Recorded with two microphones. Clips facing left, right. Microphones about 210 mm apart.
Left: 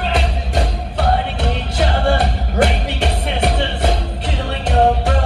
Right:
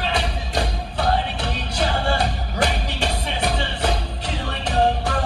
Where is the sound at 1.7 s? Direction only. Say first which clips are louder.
Left 5 dB; 60° left (ahead or behind).